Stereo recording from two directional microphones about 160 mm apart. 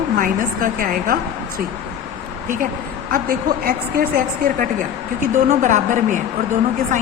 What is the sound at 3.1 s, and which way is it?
A woman's voice, 65° right (ahead or behind).